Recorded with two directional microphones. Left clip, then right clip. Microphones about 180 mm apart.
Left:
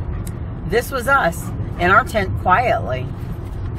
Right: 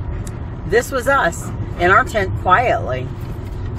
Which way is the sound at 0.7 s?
10° right (ahead or behind).